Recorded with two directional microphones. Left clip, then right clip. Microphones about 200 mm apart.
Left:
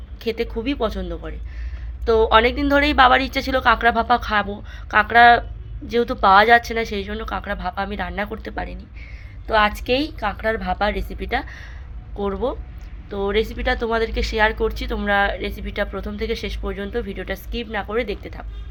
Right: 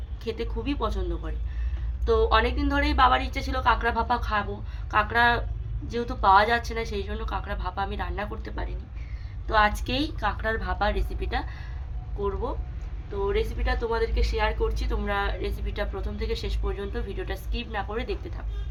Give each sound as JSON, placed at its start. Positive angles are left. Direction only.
{"t": 0.2, "sound": "a woman's voice", "side_deg": 30}